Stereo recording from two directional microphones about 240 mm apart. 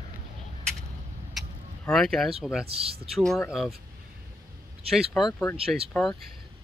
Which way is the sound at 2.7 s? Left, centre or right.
Right.